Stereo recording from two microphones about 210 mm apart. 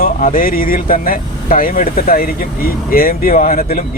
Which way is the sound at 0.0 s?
40° left (ahead or behind).